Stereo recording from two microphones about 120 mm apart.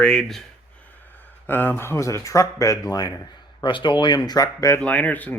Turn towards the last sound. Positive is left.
turn(degrees=15)  # may be behind; listen again after turning